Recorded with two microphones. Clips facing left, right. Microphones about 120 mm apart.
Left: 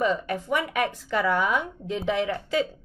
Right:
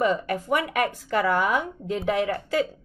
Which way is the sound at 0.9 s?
50° right (ahead or behind).